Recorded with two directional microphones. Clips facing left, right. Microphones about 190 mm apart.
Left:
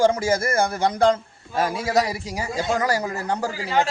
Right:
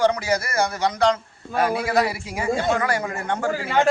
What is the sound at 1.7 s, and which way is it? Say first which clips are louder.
Speech: left 1 dB; 40° left (ahead or behind).